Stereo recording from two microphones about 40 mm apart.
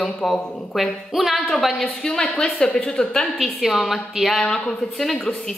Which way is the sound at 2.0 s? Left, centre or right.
Centre.